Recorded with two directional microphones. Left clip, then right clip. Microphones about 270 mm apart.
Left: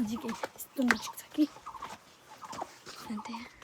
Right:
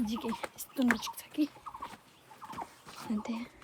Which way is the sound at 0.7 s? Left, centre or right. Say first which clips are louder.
Left 1 dB; centre.